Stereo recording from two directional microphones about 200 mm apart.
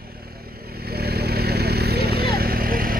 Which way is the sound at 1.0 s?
50° right (ahead or behind).